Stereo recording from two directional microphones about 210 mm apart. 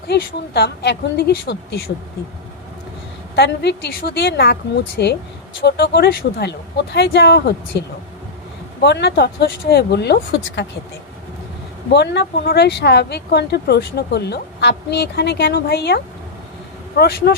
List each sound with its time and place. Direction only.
0.1 s speech: 50° left (ahead or behind)
3.3 s speech: 50° left (ahead or behind)
11.9 s speech: 55° left (ahead or behind)
17.0 s speech: 50° left (ahead or behind)